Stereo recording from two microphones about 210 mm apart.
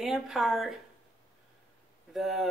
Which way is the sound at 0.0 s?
Centre (ahead or behind).